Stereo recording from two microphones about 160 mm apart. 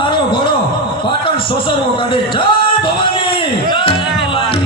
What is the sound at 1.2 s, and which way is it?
A man's voice, 35° left (ahead or behind).